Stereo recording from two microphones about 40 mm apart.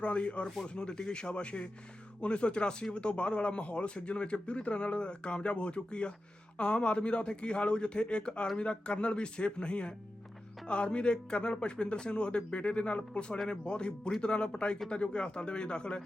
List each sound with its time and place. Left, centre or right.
0.0 s speech: left